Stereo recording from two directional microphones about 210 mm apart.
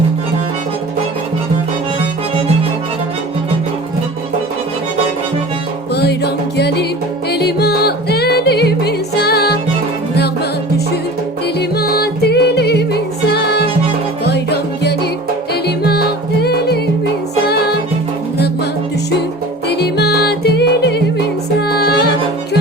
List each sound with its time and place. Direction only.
5.9 s music: 50° left (ahead or behind)
11.8 s music: 50° left (ahead or behind)
19.7 s music: 50° left (ahead or behind)